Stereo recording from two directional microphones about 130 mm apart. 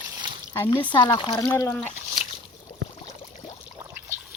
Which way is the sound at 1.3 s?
10° left (ahead or behind).